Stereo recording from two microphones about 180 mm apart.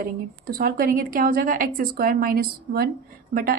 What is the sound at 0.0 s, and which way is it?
Speech, 55° right (ahead or behind).